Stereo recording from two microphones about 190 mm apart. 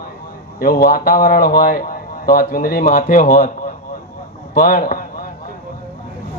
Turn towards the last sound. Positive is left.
turn(degrees=45)  # may be behind; listen again after turning